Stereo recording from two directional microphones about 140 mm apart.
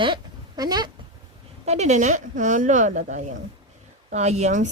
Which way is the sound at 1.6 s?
50° right (ahead or behind).